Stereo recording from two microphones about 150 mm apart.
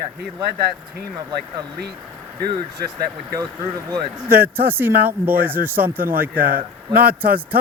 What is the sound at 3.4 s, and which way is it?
Speech, 25° right (ahead or behind).